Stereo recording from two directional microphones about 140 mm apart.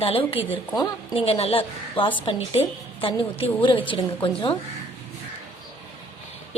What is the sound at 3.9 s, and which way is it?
Speech, 40° left (ahead or behind).